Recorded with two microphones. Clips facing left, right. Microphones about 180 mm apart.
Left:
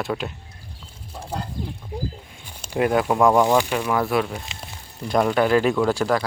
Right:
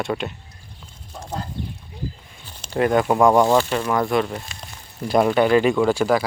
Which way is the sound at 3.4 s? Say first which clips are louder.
Right 1 dB; 10° left (ahead or behind).